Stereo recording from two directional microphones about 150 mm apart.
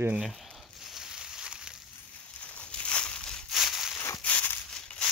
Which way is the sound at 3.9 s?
20° left (ahead or behind).